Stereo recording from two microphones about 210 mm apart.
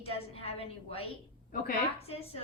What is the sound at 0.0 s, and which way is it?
A woman's voice, 30° left (ahead or behind).